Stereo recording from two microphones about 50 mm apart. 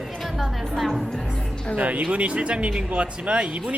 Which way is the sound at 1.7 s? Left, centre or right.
Right.